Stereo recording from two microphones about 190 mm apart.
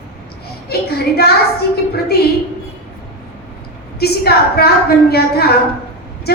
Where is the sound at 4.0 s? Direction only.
55° left (ahead or behind).